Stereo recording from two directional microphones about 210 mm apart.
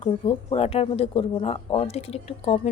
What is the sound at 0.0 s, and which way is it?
A woman's voice, 30° left (ahead or behind).